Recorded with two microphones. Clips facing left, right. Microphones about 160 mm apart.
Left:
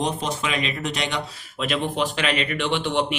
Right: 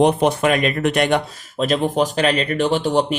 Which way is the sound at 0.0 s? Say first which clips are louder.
Right 10 dB; 60° right (ahead or behind).